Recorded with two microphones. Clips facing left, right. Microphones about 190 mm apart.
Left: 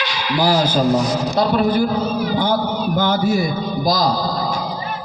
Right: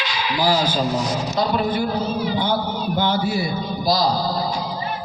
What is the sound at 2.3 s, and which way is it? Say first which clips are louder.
A man's voice: left 3 dB; 45° left (ahead or behind).